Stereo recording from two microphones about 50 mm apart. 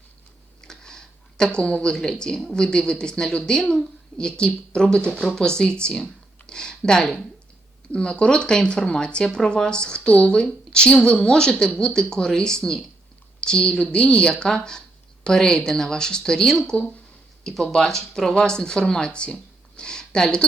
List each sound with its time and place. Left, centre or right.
0.6 s speech: centre